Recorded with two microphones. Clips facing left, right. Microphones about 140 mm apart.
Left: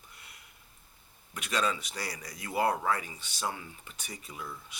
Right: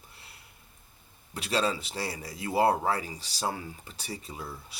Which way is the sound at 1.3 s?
30° right (ahead or behind).